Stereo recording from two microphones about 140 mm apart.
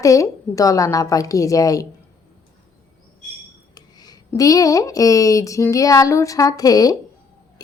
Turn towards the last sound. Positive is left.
turn(degrees=25)  # may be behind; listen again after turning